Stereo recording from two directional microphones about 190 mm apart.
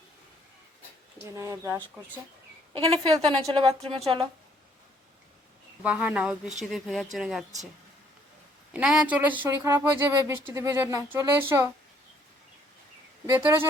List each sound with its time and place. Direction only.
1.2 s speech: 15° right (ahead or behind)
2.7 s a woman's voice: 25° right (ahead or behind)
5.8 s speech: 5° right (ahead or behind)
8.7 s speech: 5° right (ahead or behind)
13.3 s speech: 10° right (ahead or behind)